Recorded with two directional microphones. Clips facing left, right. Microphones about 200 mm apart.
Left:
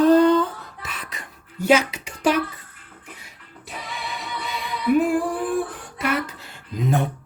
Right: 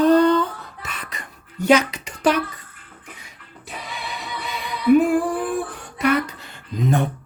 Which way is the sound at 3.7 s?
Centre (ahead or behind).